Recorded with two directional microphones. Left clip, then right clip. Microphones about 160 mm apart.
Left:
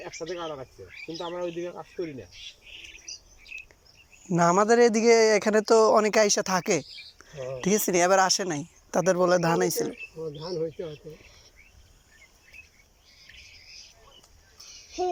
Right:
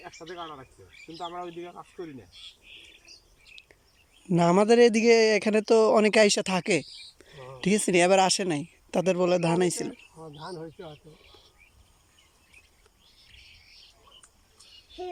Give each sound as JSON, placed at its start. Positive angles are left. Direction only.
{"t": 0.3, "sound": "speech", "side_deg": 0}
{"t": 4.4, "sound": "speech", "side_deg": -15}